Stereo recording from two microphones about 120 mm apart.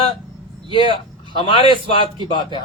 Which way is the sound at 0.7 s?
45° left (ahead or behind).